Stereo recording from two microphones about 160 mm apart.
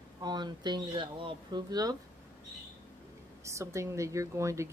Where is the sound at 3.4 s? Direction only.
20° right (ahead or behind).